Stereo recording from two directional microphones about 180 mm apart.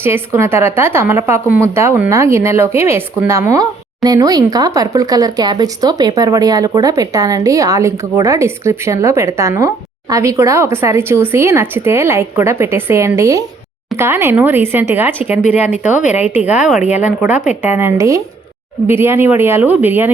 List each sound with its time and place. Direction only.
0.0 s a woman's voice: 15° right (ahead or behind)